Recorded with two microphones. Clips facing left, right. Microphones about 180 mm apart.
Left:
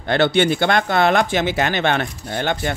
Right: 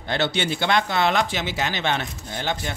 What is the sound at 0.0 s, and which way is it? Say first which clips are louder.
Speech: left 8 dB; 60° left (ahead or behind).